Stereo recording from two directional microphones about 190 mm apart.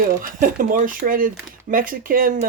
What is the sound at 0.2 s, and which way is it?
Speech, 45° right (ahead or behind).